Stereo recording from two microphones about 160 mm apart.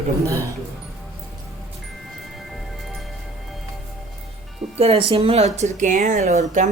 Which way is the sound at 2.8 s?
Centre (ahead or behind).